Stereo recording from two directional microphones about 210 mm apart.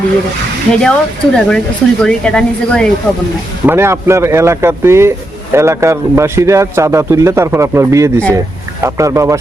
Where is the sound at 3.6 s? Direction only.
10° right (ahead or behind).